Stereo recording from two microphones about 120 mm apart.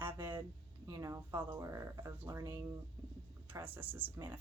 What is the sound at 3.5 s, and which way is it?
Speech, 15° right (ahead or behind).